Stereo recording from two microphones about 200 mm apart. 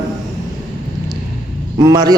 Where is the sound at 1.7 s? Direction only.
20° right (ahead or behind).